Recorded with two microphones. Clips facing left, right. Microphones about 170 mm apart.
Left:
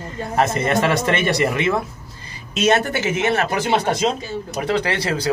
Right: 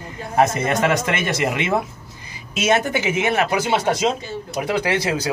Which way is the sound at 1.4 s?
20° right (ahead or behind).